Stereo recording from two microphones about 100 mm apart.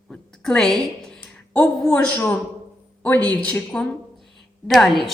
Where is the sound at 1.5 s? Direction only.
10° left (ahead or behind).